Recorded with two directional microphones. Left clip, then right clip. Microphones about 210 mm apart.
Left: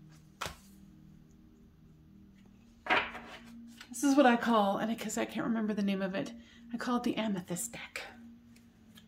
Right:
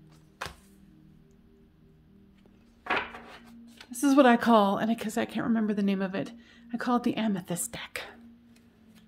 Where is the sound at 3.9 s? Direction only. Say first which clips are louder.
Right 5 dB; 50° right (ahead or behind).